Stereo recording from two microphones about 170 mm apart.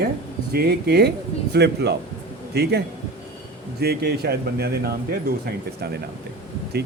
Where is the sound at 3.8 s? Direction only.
70° right (ahead or behind).